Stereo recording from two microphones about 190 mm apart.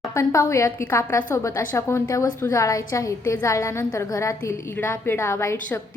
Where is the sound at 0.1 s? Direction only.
15° left (ahead or behind).